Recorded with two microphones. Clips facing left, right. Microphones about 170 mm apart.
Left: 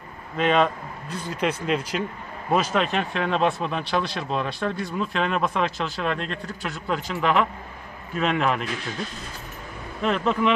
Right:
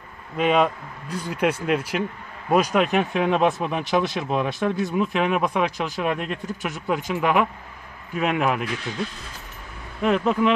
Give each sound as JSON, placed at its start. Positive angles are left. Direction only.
{"t": 0.4, "sound": "speech", "side_deg": -10}
{"t": 10.0, "sound": "speech", "side_deg": -5}